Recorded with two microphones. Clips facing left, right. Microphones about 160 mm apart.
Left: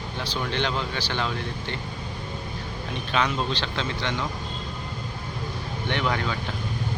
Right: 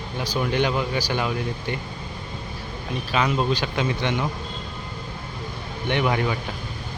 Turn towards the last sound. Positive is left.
turn(degrees=-15)  # may be behind; listen again after turning